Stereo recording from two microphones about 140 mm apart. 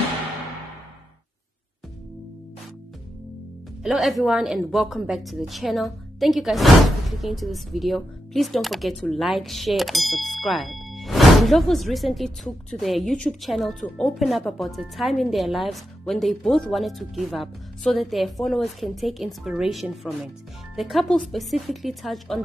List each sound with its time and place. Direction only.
3.8 s a woman's voice: centre (ahead or behind)